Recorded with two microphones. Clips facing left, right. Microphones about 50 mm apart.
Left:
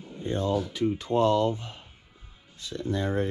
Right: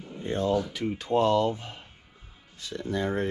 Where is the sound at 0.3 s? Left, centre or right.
Right.